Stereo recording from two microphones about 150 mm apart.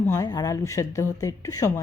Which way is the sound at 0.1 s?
25° left (ahead or behind).